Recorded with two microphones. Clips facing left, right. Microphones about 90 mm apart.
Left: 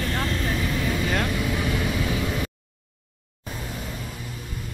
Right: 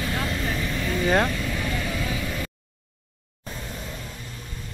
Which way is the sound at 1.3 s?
15° left (ahead or behind).